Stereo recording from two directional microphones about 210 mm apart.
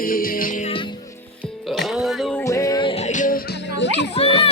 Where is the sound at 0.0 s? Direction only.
40° left (ahead or behind).